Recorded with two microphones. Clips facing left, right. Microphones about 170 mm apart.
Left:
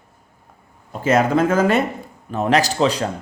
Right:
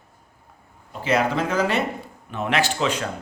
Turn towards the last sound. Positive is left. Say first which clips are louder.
# left 5 dB
turn(degrees=35)  # may be behind; listen again after turning